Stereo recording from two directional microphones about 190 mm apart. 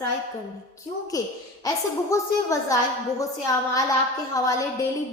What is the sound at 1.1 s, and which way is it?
A woman's voice, 20° left (ahead or behind).